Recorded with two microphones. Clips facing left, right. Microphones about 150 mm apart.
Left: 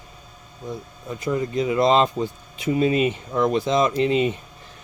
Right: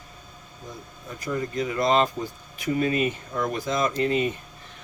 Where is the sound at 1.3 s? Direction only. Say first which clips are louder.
Left 5 dB; 20° left (ahead or behind).